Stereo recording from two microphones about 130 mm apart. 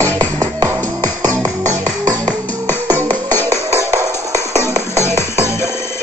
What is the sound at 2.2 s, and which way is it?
Music, 15° left (ahead or behind).